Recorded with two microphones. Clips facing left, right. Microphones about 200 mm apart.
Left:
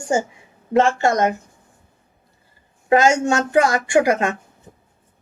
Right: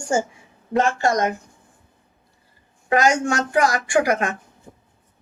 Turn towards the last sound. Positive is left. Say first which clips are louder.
# left 3 dB
turn(degrees=25)  # may be behind; listen again after turning